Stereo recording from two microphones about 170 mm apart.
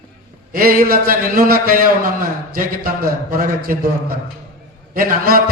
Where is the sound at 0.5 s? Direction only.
55° right (ahead or behind).